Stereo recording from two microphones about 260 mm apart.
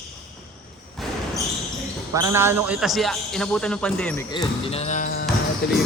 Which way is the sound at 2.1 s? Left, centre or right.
Centre.